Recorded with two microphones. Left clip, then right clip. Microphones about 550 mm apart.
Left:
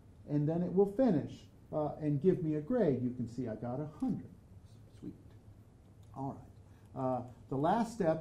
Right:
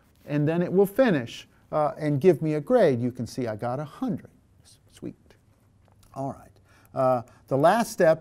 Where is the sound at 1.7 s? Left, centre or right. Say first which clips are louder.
Right 11 dB; right.